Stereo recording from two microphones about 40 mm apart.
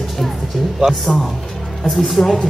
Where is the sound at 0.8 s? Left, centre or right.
Centre.